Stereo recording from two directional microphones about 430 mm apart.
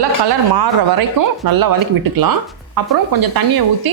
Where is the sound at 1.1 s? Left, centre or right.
Right.